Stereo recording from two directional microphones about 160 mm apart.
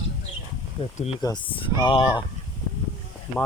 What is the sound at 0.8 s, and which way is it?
Speech, 35° left (ahead or behind).